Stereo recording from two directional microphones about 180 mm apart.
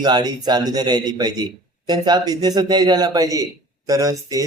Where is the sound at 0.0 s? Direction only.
25° right (ahead or behind).